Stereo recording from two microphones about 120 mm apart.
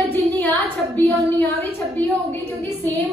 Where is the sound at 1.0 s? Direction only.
25° right (ahead or behind).